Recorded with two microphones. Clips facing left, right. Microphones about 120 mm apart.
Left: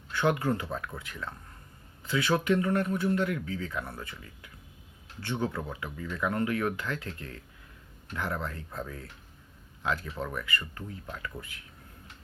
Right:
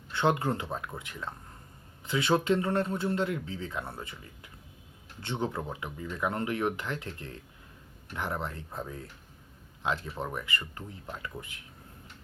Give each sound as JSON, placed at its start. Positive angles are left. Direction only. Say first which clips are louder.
{"t": 0.1, "sound": "speech", "louder": "even", "side_deg": -25}